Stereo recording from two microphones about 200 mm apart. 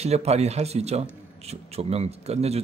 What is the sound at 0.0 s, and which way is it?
Speech, 30° right (ahead or behind).